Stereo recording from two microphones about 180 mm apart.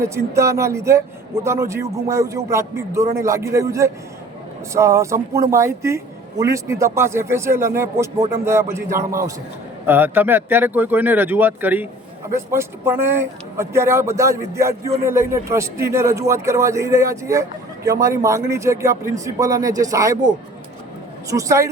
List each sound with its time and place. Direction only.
0.0 s speech: 15° right (ahead or behind)